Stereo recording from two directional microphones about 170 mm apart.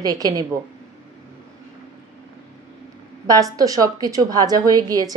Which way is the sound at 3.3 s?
20° right (ahead or behind).